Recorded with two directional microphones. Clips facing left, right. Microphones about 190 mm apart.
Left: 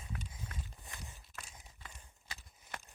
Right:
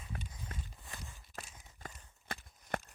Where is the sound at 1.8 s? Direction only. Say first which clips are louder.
Right 7 dB; 45° right (ahead or behind).